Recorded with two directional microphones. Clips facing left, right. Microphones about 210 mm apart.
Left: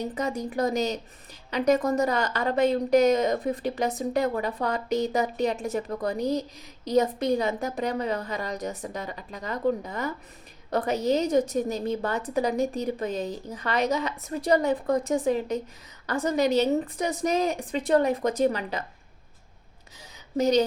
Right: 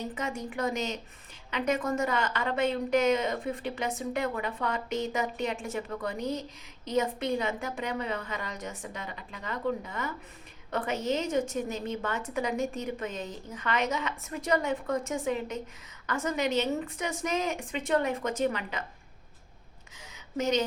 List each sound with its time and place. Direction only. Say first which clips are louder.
0.0 s a woman's voice: left 5 dB; 35° left (ahead or behind)
20.3 s a woman's voice: left 6 dB; 35° left (ahead or behind)